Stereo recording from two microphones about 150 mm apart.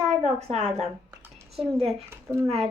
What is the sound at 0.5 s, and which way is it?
Speech, 45° right (ahead or behind).